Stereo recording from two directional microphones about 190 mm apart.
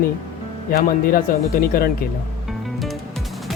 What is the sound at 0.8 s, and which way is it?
Speech, 50° left (ahead or behind).